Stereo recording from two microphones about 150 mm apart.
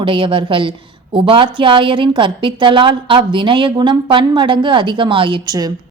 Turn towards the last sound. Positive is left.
turn(degrees=-25)  # may be behind; listen again after turning